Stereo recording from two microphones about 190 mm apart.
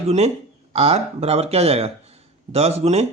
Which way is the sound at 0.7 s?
35° right (ahead or behind).